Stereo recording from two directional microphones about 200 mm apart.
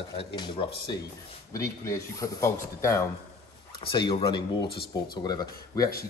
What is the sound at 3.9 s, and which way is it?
Speech, 25° left (ahead or behind).